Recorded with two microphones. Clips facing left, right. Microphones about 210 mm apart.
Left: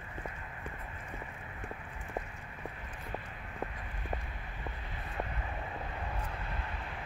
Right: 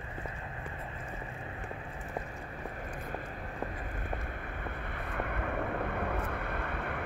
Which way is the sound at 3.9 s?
55° right (ahead or behind).